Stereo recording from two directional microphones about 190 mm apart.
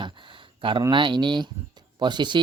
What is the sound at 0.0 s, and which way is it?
Speech, 25° right (ahead or behind).